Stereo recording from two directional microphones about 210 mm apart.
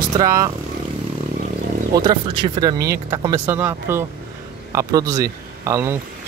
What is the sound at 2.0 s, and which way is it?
A man's voice, 20° right (ahead or behind).